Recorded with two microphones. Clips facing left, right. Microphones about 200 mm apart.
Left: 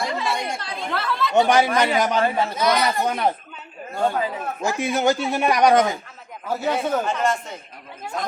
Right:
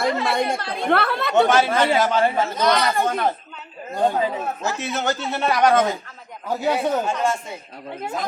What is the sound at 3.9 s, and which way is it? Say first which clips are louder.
Speech: right 2 dB; 20° right (ahead or behind).